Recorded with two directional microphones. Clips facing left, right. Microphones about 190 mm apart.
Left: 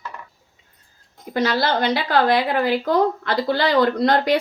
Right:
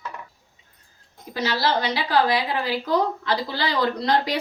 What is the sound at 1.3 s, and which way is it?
A woman's voice, 55° left (ahead or behind).